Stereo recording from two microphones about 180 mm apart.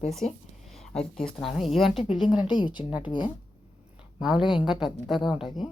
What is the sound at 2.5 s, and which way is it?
Speech, 25° left (ahead or behind).